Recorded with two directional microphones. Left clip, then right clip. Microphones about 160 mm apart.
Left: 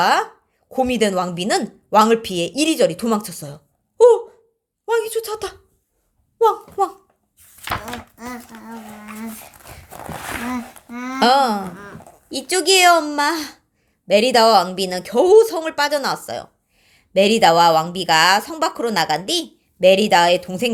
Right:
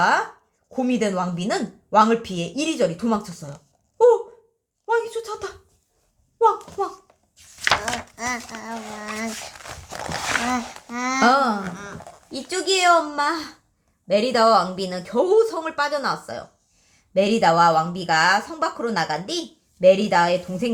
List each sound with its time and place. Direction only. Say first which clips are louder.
0.0 s speech: left 3 dB; 35° left (ahead or behind)
3.9 s a sound: left 4 dB; 40° left (ahead or behind)
4.9 s a woman's voice: left 3 dB; 35° left (ahead or behind)
8.1 s speech: right 6 dB; 40° right (ahead or behind)
10.8 s a child's voice: right 6 dB; 15° right (ahead or behind)
11.2 s speech: left 3 dB; 35° left (ahead or behind)